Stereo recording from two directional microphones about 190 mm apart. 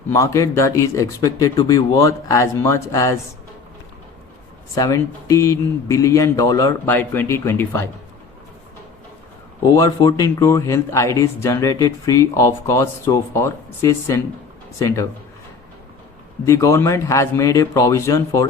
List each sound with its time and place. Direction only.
0.1 s speech: 15° left (ahead or behind)
4.7 s speech: 15° left (ahead or behind)
9.7 s speech: 20° left (ahead or behind)
16.5 s speech: 15° left (ahead or behind)